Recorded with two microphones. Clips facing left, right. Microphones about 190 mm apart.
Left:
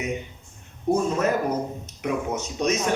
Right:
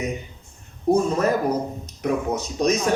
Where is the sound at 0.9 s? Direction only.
35° right (ahead or behind).